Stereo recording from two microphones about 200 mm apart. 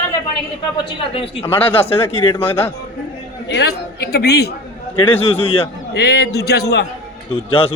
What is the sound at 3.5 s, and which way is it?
A man's voice, 55° left (ahead or behind).